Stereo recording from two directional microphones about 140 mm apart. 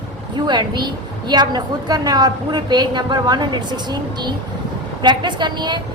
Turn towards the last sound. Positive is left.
turn(degrees=-30)  # may be behind; listen again after turning